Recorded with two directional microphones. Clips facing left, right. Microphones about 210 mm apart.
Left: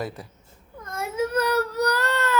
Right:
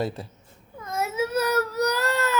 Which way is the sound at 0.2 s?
25° right (ahead or behind).